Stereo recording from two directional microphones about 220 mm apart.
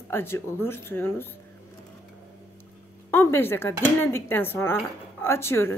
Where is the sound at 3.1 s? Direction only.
10° left (ahead or behind).